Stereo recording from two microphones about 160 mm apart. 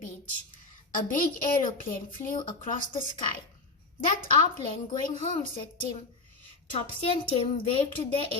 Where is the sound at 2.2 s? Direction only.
55° left (ahead or behind).